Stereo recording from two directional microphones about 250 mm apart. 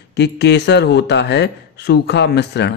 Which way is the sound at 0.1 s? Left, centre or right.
Left.